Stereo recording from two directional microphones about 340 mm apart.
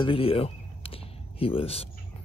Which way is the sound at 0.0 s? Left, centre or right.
Centre.